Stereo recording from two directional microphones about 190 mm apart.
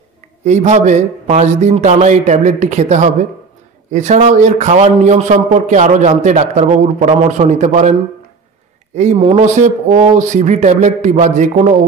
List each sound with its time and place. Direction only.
0.5 s a man's voice: 35° right (ahead or behind)
8.9 s a man's voice: 35° right (ahead or behind)